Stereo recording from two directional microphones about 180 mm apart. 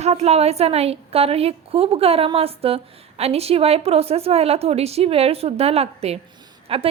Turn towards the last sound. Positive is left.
turn(degrees=-30)  # may be behind; listen again after turning